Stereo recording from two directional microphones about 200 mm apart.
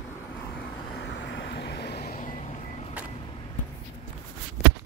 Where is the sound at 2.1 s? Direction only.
40° left (ahead or behind).